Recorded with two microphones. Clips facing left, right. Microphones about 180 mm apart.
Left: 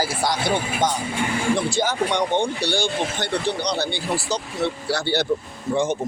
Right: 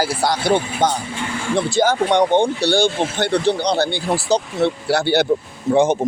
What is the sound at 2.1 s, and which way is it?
Speech, 60° right (ahead or behind).